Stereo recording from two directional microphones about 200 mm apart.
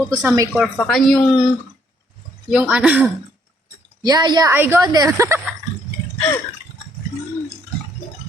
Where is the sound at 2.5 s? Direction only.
5° right (ahead or behind).